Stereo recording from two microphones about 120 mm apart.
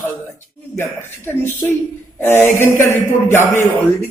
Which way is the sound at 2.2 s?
15° left (ahead or behind).